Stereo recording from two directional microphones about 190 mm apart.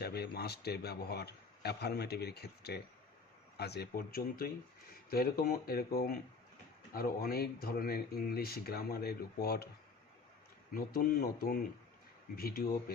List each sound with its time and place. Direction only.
0.0 s speech: 55° left (ahead or behind)
10.8 s speech: 50° left (ahead or behind)